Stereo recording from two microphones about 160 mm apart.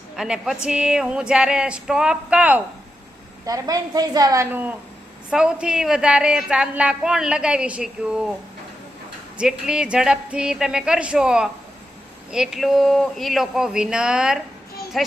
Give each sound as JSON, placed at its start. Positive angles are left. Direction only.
{"t": 0.2, "sound": "a woman's voice", "side_deg": -5}
{"t": 3.4, "sound": "a woman's voice", "side_deg": -20}
{"t": 5.3, "sound": "a woman's voice", "side_deg": -5}
{"t": 9.4, "sound": "a woman's voice", "side_deg": -5}